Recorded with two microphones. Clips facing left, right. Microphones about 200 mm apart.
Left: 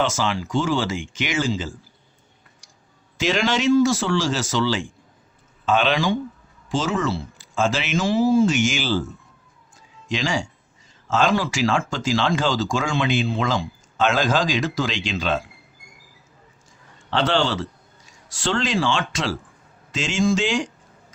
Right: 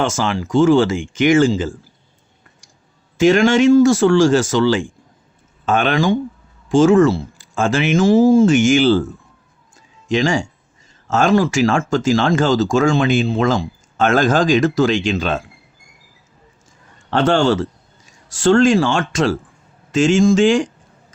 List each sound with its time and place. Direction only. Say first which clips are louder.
0.0 s speech: right 4 dB; 50° right (ahead or behind)
3.2 s speech: right 10 dB; 50° right (ahead or behind)
10.1 s speech: right 7 dB; 50° right (ahead or behind)
17.1 s speech: right 7 dB; 50° right (ahead or behind)